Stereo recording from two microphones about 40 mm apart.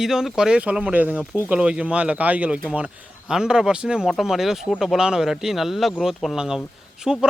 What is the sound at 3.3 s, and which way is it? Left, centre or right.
Speech, centre.